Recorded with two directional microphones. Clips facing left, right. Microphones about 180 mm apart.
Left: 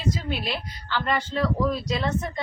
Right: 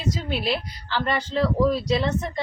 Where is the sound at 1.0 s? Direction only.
35° right (ahead or behind).